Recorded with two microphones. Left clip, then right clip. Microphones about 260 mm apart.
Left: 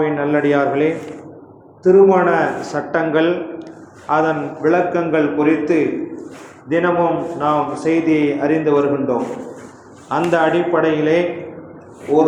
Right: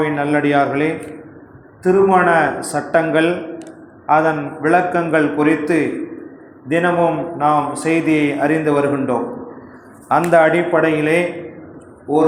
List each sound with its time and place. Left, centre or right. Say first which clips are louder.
0.0 s a man's voice: even; right